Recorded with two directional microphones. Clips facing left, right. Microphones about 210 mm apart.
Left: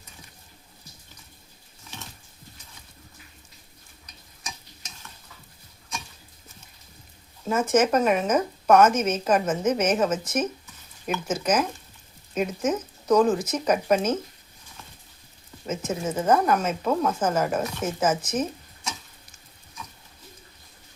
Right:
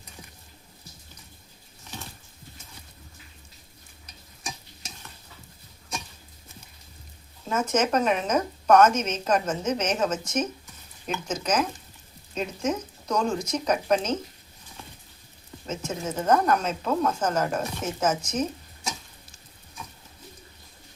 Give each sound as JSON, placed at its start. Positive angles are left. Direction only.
{"t": 7.5, "sound": "a woman's voice", "side_deg": 10}
{"t": 15.6, "sound": "a woman's voice", "side_deg": 10}